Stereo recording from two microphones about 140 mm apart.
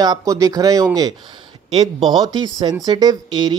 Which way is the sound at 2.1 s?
30° right (ahead or behind).